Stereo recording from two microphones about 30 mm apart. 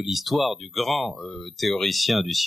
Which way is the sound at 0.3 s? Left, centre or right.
Centre.